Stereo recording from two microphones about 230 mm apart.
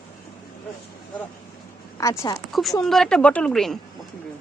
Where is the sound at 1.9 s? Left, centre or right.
Centre.